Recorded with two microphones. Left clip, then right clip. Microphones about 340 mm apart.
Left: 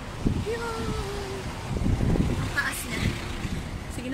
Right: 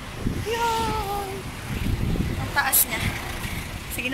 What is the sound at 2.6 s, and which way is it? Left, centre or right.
Speech, centre.